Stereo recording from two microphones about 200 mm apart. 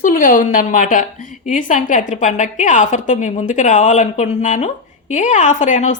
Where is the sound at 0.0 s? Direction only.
45° left (ahead or behind).